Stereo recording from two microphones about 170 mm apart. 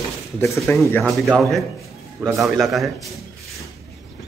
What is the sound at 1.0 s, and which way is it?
A man's voice, centre (ahead or behind).